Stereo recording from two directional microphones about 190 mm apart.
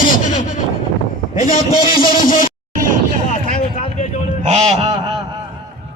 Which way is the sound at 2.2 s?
45° left (ahead or behind).